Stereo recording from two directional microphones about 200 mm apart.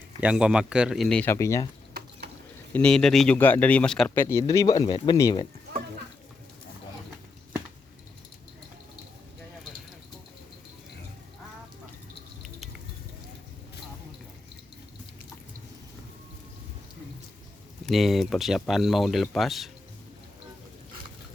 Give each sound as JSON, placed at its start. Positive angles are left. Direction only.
{"t": 0.2, "sound": "speech", "side_deg": -5}
{"t": 1.9, "sound": "stir", "side_deg": -50}
{"t": 2.7, "sound": "speech", "side_deg": 5}
{"t": 17.8, "sound": "speech", "side_deg": 0}